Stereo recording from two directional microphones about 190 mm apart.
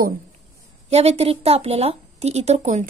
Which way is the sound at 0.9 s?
35° right (ahead or behind).